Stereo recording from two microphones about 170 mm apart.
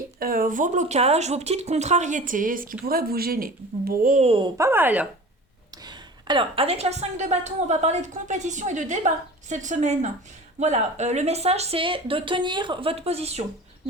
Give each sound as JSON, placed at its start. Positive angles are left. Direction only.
{"t": 0.2, "sound": "a woman's voice", "side_deg": -60}
{"t": 4.3, "sound": "a woman's voice", "side_deg": -30}
{"t": 4.5, "sound": "speech", "side_deg": -15}
{"t": 5.7, "sound": "a woman's voice", "side_deg": -25}